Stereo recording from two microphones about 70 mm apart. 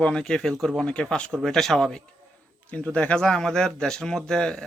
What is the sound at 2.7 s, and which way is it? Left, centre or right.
Speech, centre.